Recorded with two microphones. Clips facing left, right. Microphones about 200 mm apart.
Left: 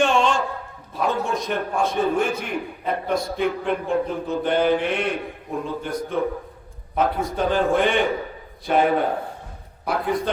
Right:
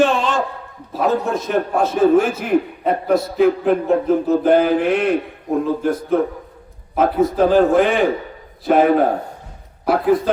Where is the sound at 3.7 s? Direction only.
40° right (ahead or behind).